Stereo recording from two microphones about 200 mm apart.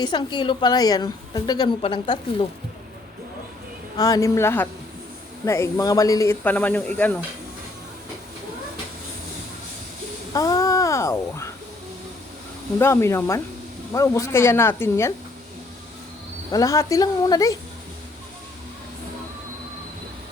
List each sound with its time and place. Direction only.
0.0 s a woman's voice: 20° left (ahead or behind)
3.9 s speech: 15° left (ahead or behind)
10.3 s babbling: 15° left (ahead or behind)
12.8 s speech: 15° left (ahead or behind)
16.5 s speech: 15° left (ahead or behind)